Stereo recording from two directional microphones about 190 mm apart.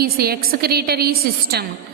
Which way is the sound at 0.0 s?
55° right (ahead or behind).